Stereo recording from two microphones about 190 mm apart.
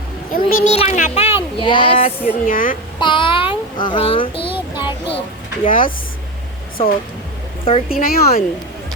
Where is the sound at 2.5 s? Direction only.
45° left (ahead or behind).